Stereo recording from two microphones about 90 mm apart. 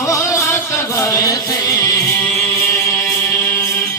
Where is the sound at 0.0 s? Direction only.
35° left (ahead or behind).